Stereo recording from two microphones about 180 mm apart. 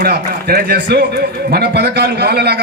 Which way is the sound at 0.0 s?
60° right (ahead or behind).